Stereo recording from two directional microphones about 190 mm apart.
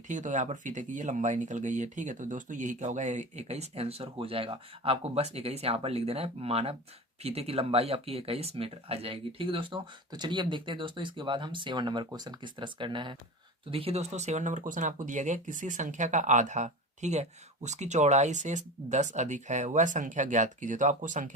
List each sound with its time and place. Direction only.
0.1 s speech: 40° right (ahead or behind)